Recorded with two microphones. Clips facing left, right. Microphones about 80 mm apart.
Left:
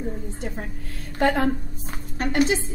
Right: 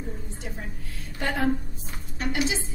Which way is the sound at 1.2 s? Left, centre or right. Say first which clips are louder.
Left 5 dB; left.